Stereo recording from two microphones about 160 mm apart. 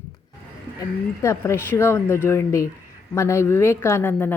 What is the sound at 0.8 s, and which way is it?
A woman's voice, 20° left (ahead or behind).